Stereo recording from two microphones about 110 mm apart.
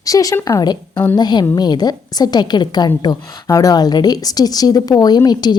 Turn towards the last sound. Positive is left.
turn(degrees=40)  # may be behind; listen again after turning